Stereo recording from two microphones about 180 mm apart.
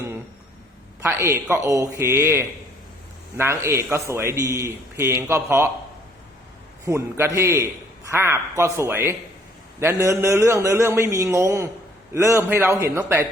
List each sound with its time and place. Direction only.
1.0 s a man's voice: 15° right (ahead or behind)
6.8 s a man's voice: 15° right (ahead or behind)